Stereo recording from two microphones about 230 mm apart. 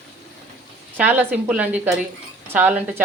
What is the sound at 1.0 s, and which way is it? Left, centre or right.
Speech, centre.